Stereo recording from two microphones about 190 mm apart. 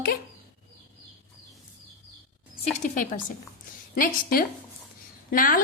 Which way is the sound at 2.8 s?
45° left (ahead or behind).